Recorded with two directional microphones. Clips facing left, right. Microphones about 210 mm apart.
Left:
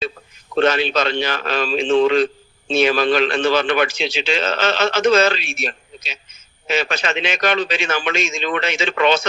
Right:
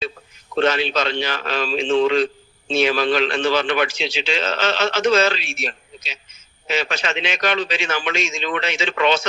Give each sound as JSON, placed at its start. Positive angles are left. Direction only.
{"t": 0.5, "sound": "a man's voice", "side_deg": 50}